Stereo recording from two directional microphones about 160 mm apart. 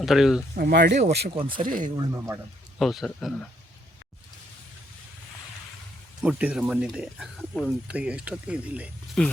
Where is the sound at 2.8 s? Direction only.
Centre (ahead or behind).